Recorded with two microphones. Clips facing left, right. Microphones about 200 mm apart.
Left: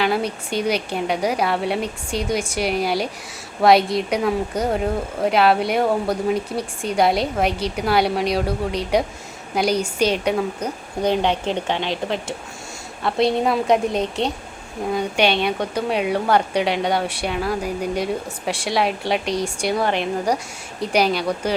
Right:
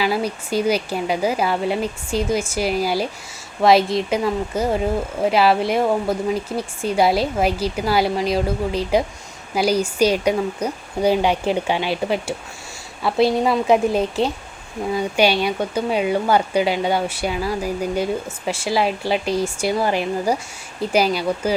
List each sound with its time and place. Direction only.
0.0 s speech: 5° right (ahead or behind)